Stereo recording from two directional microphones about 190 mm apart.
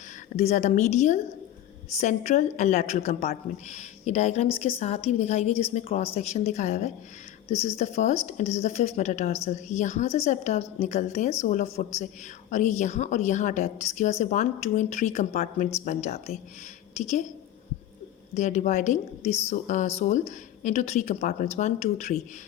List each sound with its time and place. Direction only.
0.3 s a woman's voice: 35° left (ahead or behind)
18.3 s a woman's voice: 40° left (ahead or behind)